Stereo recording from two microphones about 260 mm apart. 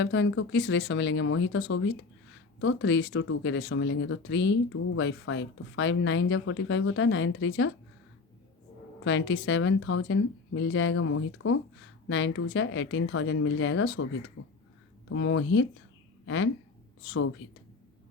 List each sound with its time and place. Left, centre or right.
0.0 s speech: left
9.0 s speech: left
14.4 s speech: left
15.1 s speech: left